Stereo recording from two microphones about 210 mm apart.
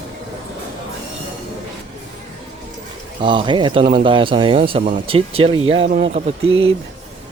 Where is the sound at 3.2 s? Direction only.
20° right (ahead or behind).